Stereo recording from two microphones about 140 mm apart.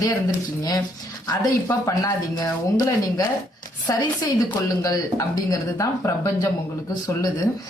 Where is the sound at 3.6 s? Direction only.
25° left (ahead or behind).